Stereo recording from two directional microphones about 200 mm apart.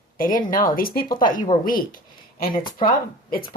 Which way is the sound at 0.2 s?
45° left (ahead or behind).